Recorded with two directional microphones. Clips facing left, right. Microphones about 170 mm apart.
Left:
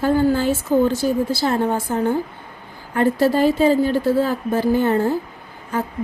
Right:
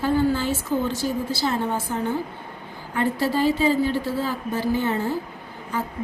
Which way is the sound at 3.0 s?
45° left (ahead or behind).